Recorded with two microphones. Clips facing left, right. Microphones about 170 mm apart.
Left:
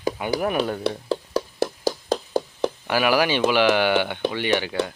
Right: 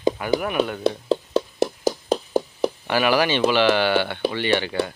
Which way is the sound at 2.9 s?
10° left (ahead or behind).